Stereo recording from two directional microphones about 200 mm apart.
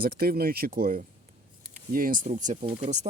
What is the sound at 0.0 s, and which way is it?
Speech, 50° right (ahead or behind).